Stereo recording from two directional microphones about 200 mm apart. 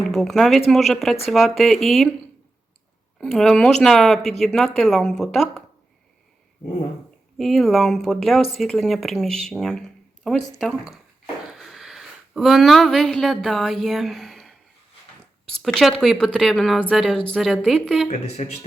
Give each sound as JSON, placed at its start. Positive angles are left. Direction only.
{"t": 0.1, "sound": "speech", "side_deg": 0}
{"t": 3.2, "sound": "speech", "side_deg": 0}
{"t": 7.3, "sound": "speech", "side_deg": 0}
{"t": 18.1, "sound": "speech", "side_deg": 35}